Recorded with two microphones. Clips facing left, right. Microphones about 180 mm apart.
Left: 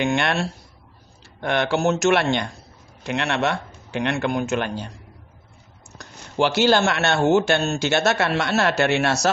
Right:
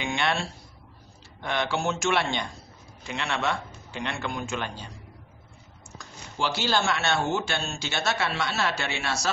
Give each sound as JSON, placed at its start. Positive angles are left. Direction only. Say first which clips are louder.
{"t": 0.0, "sound": "speech", "louder": "left 6 dB", "side_deg": 70}
{"t": 5.9, "sound": "speech", "louder": "left 9 dB", "side_deg": 70}